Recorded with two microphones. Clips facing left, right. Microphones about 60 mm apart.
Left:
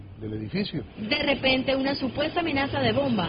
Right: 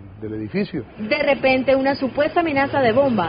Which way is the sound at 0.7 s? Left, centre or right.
Right.